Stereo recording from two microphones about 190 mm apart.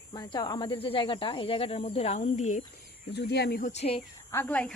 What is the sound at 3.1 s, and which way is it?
Speech, 55° left (ahead or behind).